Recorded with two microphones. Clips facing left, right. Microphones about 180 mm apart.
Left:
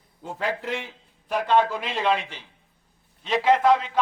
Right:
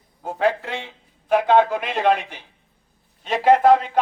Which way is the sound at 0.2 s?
70° right (ahead or behind).